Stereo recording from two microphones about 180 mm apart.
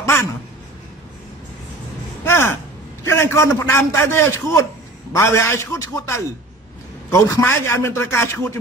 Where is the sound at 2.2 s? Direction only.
15° left (ahead or behind).